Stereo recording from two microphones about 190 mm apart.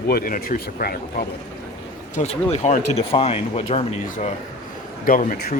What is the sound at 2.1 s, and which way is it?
Speech, 35° left (ahead or behind).